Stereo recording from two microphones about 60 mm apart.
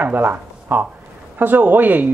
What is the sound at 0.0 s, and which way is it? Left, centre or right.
Speech, right.